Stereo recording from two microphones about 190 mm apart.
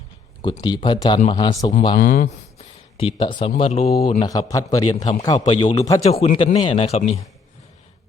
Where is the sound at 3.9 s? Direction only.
50° left (ahead or behind).